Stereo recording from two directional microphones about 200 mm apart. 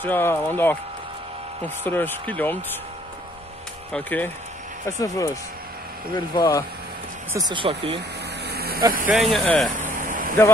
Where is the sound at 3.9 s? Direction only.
5° left (ahead or behind).